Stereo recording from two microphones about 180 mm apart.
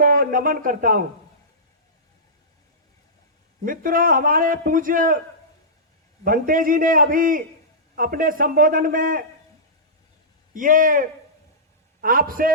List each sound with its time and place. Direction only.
0.0 s a man's voice: 50° right (ahead or behind)
3.6 s a man's voice: 50° right (ahead or behind)
6.2 s a man's voice: 50° right (ahead or behind)
10.5 s a man's voice: 50° right (ahead or behind)